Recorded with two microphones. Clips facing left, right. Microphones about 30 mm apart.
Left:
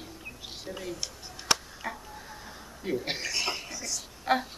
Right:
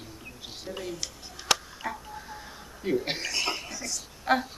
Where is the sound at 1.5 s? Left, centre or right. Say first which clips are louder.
Right 2 dB; centre.